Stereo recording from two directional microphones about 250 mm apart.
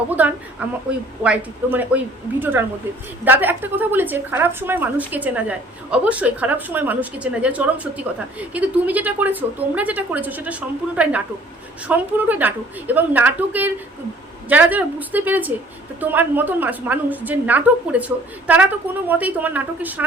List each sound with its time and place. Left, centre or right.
0.2 s a woman's voice: centre
3.2 s a woman's voice: centre